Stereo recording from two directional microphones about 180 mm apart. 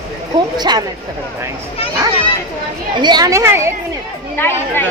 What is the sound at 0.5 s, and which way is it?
Speech, 25° right (ahead or behind).